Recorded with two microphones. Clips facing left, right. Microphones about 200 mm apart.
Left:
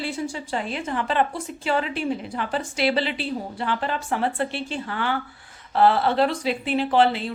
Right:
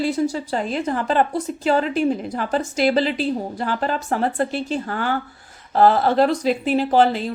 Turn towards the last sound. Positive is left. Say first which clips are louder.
# right 3 dB
turn(degrees=-40)  # may be behind; listen again after turning